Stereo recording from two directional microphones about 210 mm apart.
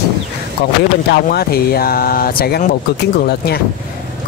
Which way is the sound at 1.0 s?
50° left (ahead or behind).